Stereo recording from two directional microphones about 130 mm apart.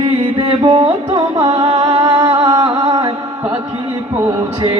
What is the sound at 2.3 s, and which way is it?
Music, 35° right (ahead or behind).